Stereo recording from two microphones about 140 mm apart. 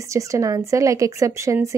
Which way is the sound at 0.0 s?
20° right (ahead or behind).